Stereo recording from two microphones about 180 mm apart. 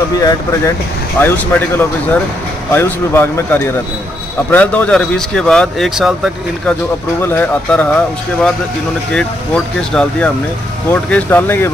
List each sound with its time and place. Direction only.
0.2 s speech: 20° left (ahead or behind)
1.2 s speech: 10° left (ahead or behind)
7.2 s speech: 10° left (ahead or behind)
9.8 s speech: 5° left (ahead or behind)